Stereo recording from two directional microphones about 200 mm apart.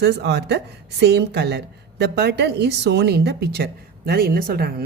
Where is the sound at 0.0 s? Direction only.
55° right (ahead or behind).